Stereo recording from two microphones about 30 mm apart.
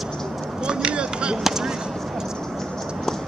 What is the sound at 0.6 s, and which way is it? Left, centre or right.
Chop, right.